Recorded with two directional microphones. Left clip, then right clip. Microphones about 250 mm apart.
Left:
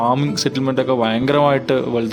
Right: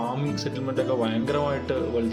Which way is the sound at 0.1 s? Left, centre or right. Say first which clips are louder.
Left 11 dB; left.